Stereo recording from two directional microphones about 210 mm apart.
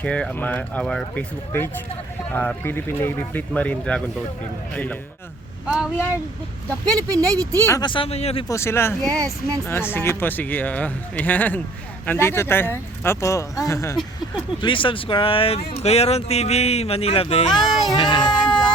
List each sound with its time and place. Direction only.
0.0 s speech: 5° left (ahead or behind)
6.7 s speech: 15° right (ahead or behind)
7.7 s speech: 20° left (ahead or behind)
8.4 s speech: 15° left (ahead or behind)
9.0 s speech: 15° right (ahead or behind)
9.6 s speech: 10° left (ahead or behind); by 17.5 s 25° left (ahead or behind)
17.5 s speech: centre (ahead or behind)
17.9 s speech: 20° left (ahead or behind)